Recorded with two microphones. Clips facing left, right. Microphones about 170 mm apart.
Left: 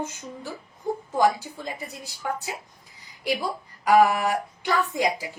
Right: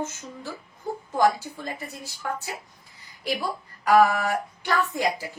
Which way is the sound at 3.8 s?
15° left (ahead or behind).